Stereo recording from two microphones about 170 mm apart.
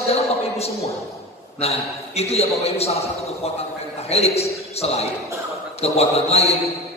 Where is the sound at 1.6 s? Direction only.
40° left (ahead or behind).